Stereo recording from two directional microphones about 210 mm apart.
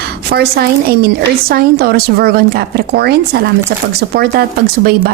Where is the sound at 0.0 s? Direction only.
50° right (ahead or behind).